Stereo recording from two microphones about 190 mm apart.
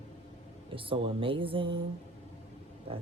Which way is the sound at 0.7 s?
25° right (ahead or behind).